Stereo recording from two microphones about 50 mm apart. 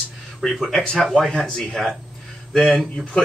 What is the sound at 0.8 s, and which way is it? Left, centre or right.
Speech, centre.